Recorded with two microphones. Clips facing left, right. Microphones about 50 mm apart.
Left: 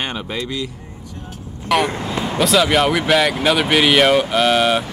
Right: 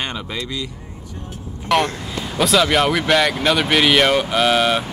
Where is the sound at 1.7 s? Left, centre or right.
Centre.